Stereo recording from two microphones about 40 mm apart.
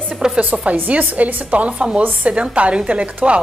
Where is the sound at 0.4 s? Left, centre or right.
Right.